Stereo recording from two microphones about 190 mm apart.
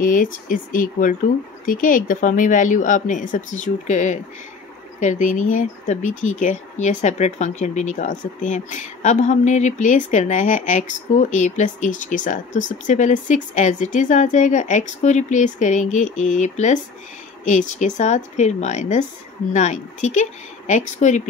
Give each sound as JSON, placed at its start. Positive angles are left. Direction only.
{"t": 0.0, "sound": "speech", "side_deg": 45}